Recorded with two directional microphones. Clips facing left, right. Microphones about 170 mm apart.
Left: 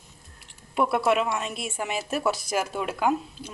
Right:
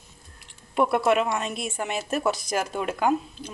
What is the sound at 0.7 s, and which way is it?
A woman's voice, 5° left (ahead or behind).